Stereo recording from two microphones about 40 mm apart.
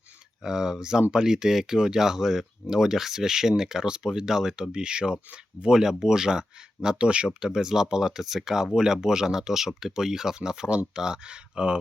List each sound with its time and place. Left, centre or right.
0.4 s speech: centre